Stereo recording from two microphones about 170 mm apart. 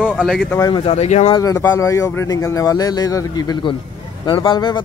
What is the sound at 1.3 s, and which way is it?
Speech, 20° left (ahead or behind).